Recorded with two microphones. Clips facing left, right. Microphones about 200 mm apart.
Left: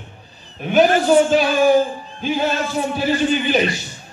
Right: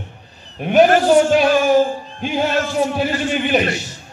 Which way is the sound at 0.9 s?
70° right (ahead or behind).